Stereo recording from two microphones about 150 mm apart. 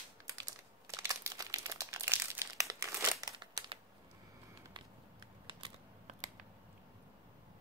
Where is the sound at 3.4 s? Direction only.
35° right (ahead or behind).